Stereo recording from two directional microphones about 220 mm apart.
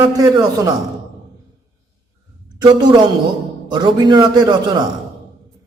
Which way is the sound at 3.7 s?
20° right (ahead or behind).